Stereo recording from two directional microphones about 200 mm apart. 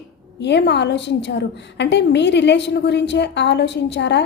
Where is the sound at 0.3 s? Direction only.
60° left (ahead or behind).